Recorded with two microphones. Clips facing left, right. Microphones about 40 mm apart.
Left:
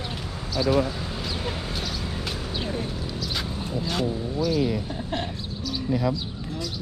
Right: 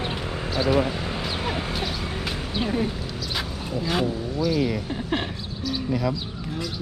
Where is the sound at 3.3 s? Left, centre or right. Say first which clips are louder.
Right 2 dB; centre.